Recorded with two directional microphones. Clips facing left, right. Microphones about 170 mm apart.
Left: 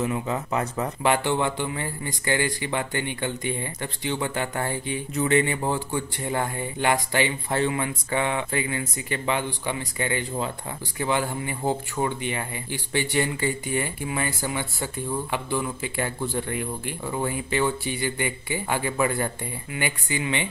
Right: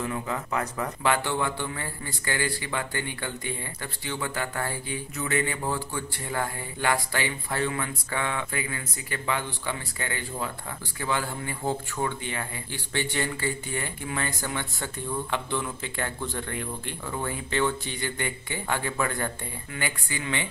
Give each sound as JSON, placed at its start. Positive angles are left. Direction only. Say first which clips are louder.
{"t": 0.0, "sound": "a man's voice", "louder": "left 4 dB", "side_deg": 20}